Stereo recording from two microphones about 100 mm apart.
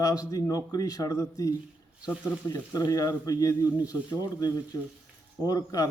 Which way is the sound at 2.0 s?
10° right (ahead or behind).